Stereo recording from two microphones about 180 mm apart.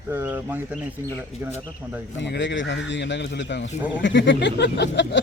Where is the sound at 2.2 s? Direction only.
75° left (ahead or behind).